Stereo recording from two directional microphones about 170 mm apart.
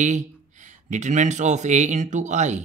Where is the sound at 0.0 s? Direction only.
45° right (ahead or behind).